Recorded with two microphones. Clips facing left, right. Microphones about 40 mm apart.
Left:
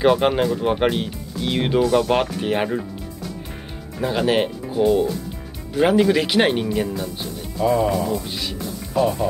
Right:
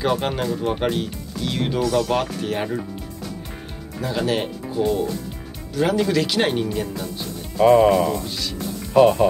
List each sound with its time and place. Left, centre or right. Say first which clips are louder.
0.0 s speech: left 5 dB; centre
4.0 s speech: left 4 dB; left
4.6 s music: left 2 dB; centre
5.8 s speech: left 3 dB; centre
7.5 s speech: right 5 dB; right
8.2 s speech: even; centre
8.9 s speech: right 6 dB; right